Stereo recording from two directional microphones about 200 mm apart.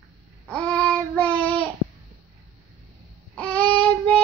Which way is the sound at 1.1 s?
10° left (ahead or behind).